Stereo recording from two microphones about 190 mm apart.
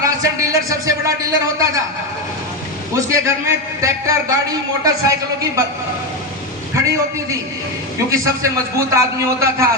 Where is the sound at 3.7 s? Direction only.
15° right (ahead or behind).